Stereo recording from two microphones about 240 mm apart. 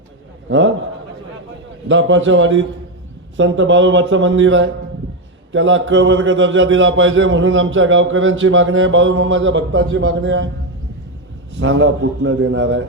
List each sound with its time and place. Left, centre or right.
0.4 s a man's voice: right
1.9 s speech: right
11.6 s a man's voice: right